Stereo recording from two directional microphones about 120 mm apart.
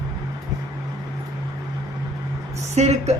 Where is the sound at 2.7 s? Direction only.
65° right (ahead or behind).